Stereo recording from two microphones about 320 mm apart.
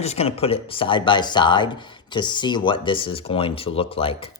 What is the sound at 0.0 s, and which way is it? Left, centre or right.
Speech, centre.